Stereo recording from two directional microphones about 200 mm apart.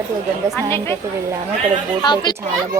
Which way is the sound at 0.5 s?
10° left (ahead or behind).